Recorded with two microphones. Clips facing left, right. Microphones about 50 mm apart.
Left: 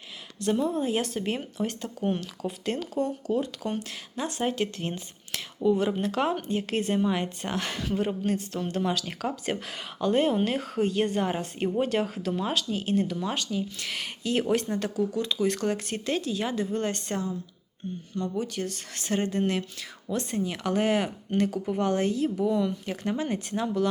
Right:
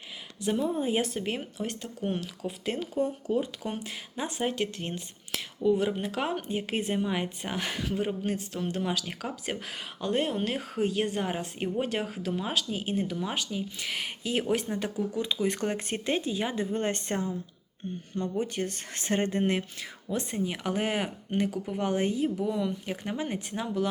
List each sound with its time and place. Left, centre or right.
0.3 s speech: centre
4.4 s a woman's voice: centre
14.8 s speech: centre
20.1 s speech: centre